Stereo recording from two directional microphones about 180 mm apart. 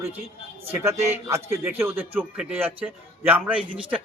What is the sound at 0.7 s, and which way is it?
A man's voice, 15° right (ahead or behind).